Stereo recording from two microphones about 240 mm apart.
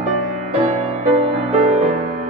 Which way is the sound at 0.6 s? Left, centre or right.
Right.